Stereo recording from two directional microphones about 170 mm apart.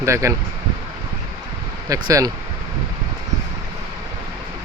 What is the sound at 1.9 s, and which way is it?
Speech, 20° right (ahead or behind).